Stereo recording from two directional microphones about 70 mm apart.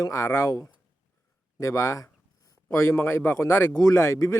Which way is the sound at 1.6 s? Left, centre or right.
Left.